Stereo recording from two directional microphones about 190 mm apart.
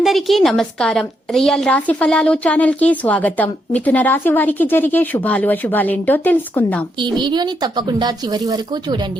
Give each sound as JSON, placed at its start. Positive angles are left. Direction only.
{"t": 0.0, "sound": "a woman's voice", "side_deg": 0}
{"t": 7.0, "sound": "a woman's voice", "side_deg": -25}